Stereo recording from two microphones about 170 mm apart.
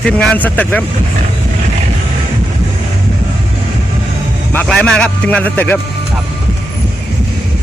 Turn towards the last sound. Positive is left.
turn(degrees=10)  # may be behind; listen again after turning